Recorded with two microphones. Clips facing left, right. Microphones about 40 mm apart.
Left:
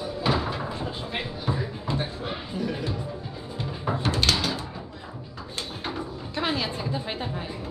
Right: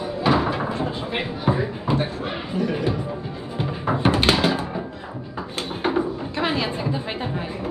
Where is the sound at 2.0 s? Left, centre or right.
Right.